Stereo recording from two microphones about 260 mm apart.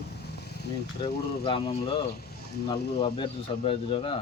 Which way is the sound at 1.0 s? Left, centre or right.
Left.